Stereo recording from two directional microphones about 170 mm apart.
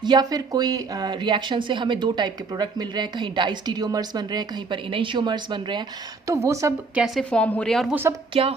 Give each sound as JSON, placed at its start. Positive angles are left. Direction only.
{"t": 0.0, "sound": "speech", "side_deg": -25}
{"t": 7.0, "sound": "a woman's voice", "side_deg": 5}
{"t": 8.3, "sound": "speech", "side_deg": -35}